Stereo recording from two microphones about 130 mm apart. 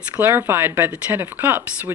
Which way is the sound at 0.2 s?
20° right (ahead or behind).